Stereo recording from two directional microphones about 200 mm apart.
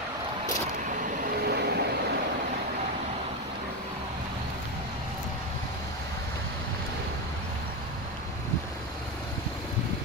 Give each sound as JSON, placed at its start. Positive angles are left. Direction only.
{"t": 1.4, "sound": "vehicle", "side_deg": -55}